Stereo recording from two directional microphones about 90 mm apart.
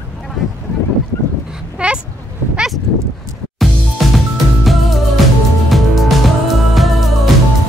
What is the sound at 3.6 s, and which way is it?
Music, centre (ahead or behind).